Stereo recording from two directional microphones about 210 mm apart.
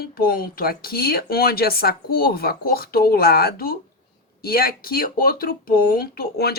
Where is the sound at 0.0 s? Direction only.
45° left (ahead or behind).